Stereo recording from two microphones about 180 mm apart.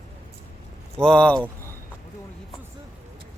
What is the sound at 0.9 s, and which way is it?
Speech, 5° left (ahead or behind).